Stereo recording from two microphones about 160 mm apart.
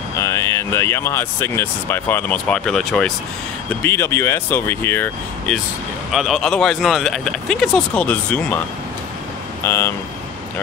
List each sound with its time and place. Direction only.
0.2 s speech: 15° left (ahead or behind)
3.8 s speech: 15° left (ahead or behind)
6.1 s speech: centre (ahead or behind); by 9.9 s 15° left (ahead or behind)